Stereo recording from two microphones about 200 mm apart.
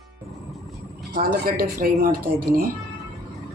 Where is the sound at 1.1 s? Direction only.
45° right (ahead or behind).